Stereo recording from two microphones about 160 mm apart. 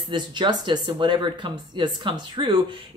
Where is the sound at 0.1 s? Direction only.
30° right (ahead or behind).